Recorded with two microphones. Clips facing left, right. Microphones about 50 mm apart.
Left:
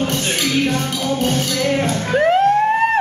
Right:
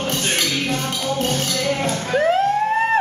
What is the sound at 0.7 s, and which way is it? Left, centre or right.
Music, left.